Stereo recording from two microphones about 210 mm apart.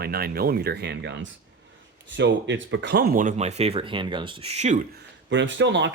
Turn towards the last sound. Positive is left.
turn(degrees=-60)  # may be behind; listen again after turning